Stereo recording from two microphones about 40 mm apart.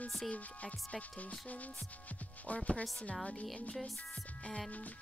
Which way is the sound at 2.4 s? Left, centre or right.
Left.